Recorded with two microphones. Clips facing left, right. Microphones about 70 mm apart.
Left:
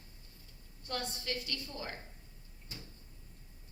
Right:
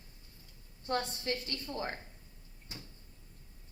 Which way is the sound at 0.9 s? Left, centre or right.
Right.